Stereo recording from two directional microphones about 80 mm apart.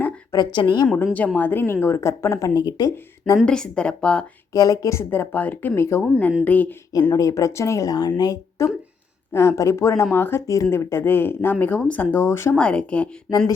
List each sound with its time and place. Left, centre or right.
0.3 s a woman's voice: left
1.4 s speech: left
2.6 s speech: left
3.4 s speech: centre
4.5 s speech: left
5.1 s speech: left
5.7 s speech: left
6.0 s speech: centre
7.1 s speech: left
8.6 s speech: left
10.4 s speech: left
12.5 s speech: centre